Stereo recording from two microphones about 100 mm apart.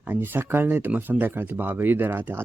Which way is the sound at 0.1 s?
20° right (ahead or behind).